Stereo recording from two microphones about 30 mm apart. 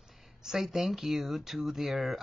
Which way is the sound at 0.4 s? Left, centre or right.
Centre.